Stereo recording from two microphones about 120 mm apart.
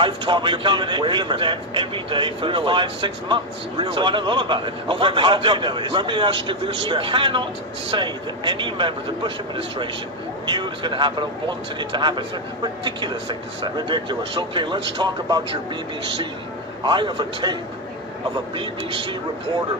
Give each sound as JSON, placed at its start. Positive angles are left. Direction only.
{"t": 0.0, "sound": "a man's voice", "side_deg": -40}
{"t": 10.5, "sound": "speech", "side_deg": -40}
{"t": 16.8, "sound": "a man's voice", "side_deg": -40}